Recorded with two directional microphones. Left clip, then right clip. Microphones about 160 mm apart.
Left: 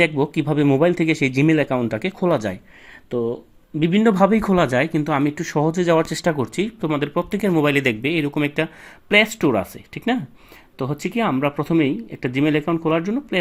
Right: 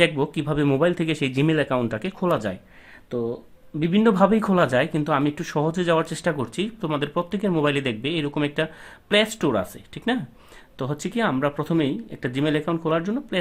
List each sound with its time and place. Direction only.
0.0 s speech: 20° left (ahead or behind)